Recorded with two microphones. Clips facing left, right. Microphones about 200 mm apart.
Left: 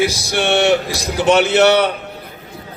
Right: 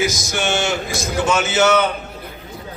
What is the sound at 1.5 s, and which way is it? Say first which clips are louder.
Speech: left 4 dB; 35° left (ahead or behind).